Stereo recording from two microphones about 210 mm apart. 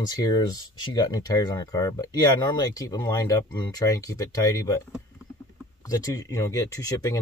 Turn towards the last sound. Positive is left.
turn(degrees=15)  # may be behind; listen again after turning